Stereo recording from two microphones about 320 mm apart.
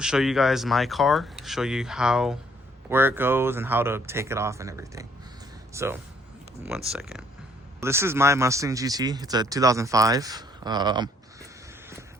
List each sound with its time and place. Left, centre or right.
0.0 s speech: centre